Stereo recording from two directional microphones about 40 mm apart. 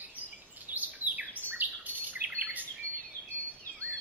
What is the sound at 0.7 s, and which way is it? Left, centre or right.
Chirp, right.